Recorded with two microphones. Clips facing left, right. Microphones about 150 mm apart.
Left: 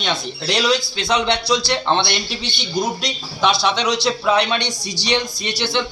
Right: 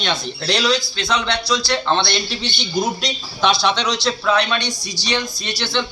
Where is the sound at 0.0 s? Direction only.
5° left (ahead or behind).